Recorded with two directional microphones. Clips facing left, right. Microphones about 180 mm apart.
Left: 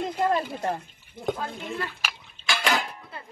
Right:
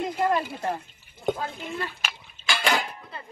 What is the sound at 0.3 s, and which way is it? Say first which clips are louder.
Speech: even; 30° left (ahead or behind).